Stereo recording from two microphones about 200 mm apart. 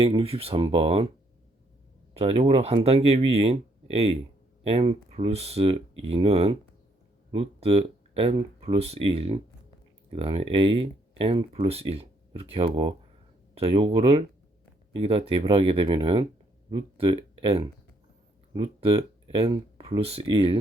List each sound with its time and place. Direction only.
0.0 s speech: 25° right (ahead or behind)
2.1 s speech: 30° right (ahead or behind)